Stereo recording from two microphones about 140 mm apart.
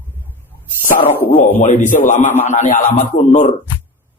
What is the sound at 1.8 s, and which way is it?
A man's voice, 70° left (ahead or behind).